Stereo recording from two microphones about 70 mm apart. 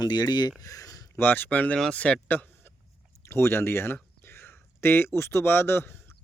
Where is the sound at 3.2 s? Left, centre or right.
Left.